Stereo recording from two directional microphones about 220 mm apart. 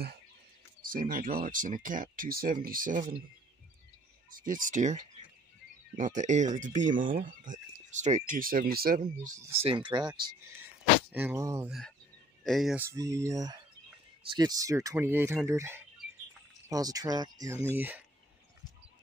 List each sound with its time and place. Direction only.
0.8 s speech: 40° right (ahead or behind)
4.4 s speech: 40° right (ahead or behind)
9.6 s speech: 25° right (ahead or behind)
11.1 s speech: 10° right (ahead or behind)
12.4 s speech: centre (ahead or behind)
12.9 s speech: 15° right (ahead or behind)